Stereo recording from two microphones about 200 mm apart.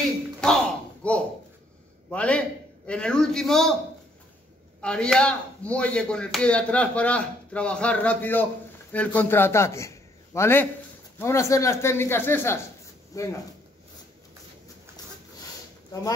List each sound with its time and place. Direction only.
0.4 s a sound: 5° left (ahead or behind)
2.0 s a man's voice: 5° left (ahead or behind)
4.8 s a man's voice: 5° left (ahead or behind)